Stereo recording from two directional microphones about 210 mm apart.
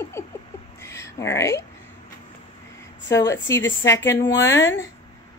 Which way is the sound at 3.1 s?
15° left (ahead or behind).